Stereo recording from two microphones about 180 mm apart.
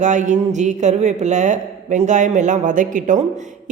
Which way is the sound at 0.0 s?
45° right (ahead or behind).